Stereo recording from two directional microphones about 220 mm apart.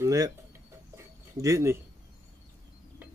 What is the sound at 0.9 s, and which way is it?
Bird, 15° right (ahead or behind).